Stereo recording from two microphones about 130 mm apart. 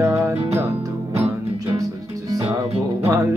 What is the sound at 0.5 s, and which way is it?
Speech, 25° right (ahead or behind).